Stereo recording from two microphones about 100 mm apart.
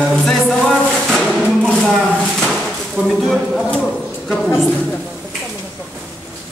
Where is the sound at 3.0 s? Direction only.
Centre (ahead or behind).